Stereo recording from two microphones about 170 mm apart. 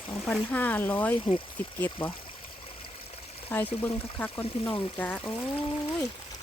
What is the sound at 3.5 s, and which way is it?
Speech, 10° left (ahead or behind).